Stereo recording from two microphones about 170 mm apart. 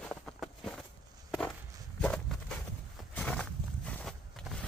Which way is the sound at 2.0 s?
5° left (ahead or behind).